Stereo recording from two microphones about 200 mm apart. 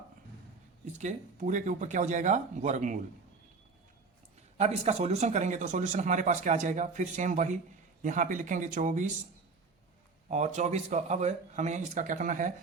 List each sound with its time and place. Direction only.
0.9 s speech: 35° right (ahead or behind)
4.5 s speech: 35° right (ahead or behind)
10.2 s speech: 35° right (ahead or behind)